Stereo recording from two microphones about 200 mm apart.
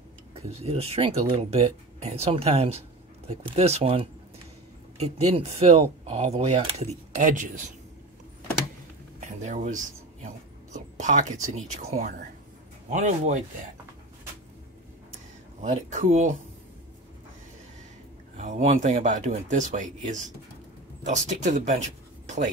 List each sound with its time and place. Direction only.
0.3 s speech: 30° right (ahead or behind)
9.2 s a sound: 35° right (ahead or behind)
11.5 s speech: 35° right (ahead or behind)
15.6 s speech: 35° right (ahead or behind)
18.4 s speech: 35° right (ahead or behind)
21.0 s speech: 35° right (ahead or behind)